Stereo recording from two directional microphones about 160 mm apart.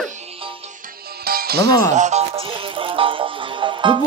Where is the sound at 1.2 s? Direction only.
70° right (ahead or behind).